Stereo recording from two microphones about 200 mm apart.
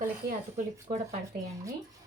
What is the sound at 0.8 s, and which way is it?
Speech, 35° right (ahead or behind).